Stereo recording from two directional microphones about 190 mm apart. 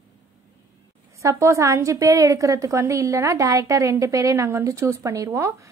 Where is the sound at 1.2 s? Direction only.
15° right (ahead or behind).